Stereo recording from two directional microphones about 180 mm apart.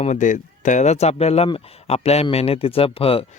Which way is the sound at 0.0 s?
45° left (ahead or behind).